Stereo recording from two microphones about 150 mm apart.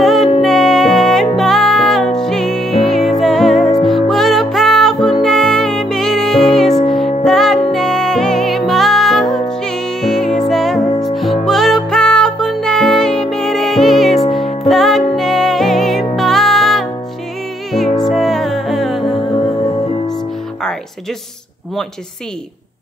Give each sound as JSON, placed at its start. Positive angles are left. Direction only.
{"t": 0.0, "sound": "music", "side_deg": 0}
{"t": 19.5, "sound": "music", "side_deg": 25}